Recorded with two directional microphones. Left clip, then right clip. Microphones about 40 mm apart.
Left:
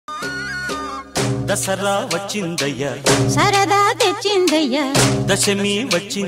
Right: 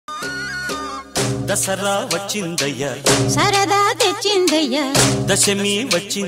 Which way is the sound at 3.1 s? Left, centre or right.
Right.